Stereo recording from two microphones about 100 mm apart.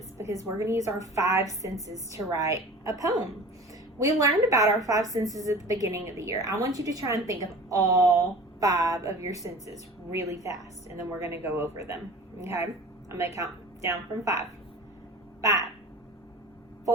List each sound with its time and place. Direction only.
0.2 s a woman's voice: 30° right (ahead or behind)